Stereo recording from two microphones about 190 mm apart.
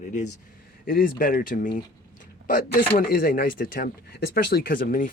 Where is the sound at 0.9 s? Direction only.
50° left (ahead or behind).